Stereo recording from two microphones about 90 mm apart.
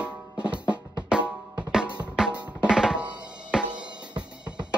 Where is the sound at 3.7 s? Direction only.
55° right (ahead or behind).